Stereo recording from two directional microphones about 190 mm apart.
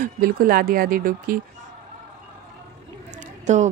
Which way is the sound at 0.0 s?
50° right (ahead or behind).